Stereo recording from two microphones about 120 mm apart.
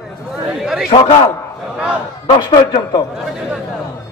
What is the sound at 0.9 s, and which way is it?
Speech, 50° left (ahead or behind).